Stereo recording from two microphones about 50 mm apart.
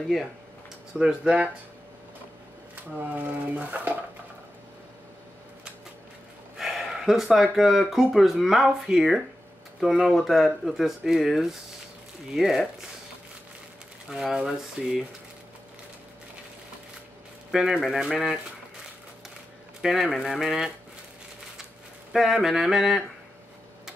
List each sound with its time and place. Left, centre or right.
0.9 s speech: centre
2.7 s speech: right
6.5 s speech: centre
9.8 s speech: centre
14.2 s speech: centre
17.5 s speech: centre
19.8 s speech: centre
22.1 s speech: centre